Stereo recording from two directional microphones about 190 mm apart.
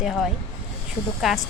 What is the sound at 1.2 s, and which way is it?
Speech, centre (ahead or behind).